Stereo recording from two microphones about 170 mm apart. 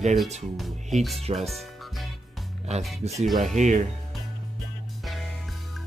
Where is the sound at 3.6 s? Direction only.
45° right (ahead or behind).